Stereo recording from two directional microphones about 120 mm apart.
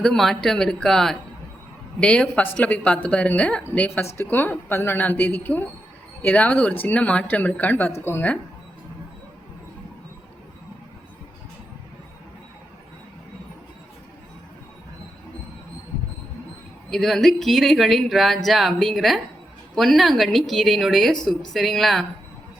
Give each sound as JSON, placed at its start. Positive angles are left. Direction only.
{"t": 0.0, "sound": "speech", "side_deg": 5}
{"t": 16.9, "sound": "speech", "side_deg": 0}